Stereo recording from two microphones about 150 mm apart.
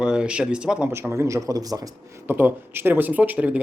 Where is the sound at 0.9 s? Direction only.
20° right (ahead or behind).